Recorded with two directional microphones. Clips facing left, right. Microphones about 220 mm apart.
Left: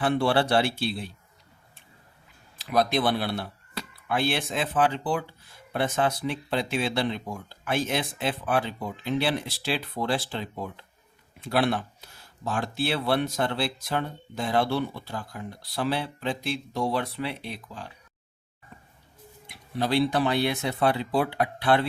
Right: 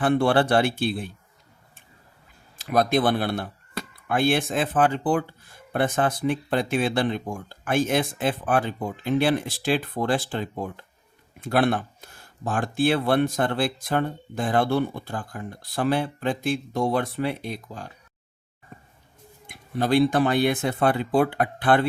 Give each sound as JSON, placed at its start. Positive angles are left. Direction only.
{"t": 0.0, "sound": "speech", "side_deg": -50}
{"t": 2.6, "sound": "speech", "side_deg": -50}
{"t": 19.5, "sound": "speech", "side_deg": -50}